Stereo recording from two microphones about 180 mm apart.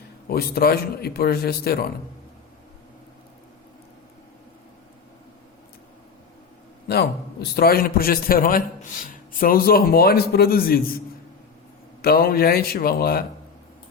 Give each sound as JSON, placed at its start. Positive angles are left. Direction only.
{"t": 0.3, "sound": "a man's voice", "side_deg": 60}
{"t": 7.4, "sound": "a man's voice", "side_deg": 60}
{"t": 12.0, "sound": "a man's voice", "side_deg": 55}